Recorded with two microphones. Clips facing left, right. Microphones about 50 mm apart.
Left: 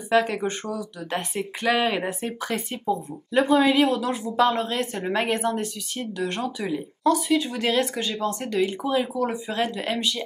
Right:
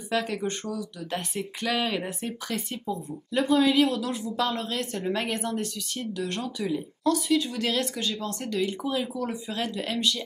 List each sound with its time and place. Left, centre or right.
0.1 s speech: centre